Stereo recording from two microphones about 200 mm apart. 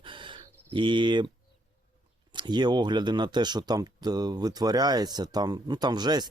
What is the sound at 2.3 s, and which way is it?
Speech, 20° right (ahead or behind).